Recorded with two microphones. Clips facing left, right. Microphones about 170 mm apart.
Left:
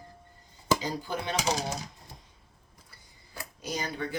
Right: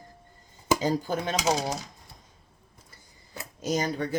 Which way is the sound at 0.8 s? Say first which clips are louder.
Right 6 dB; 45° right (ahead or behind).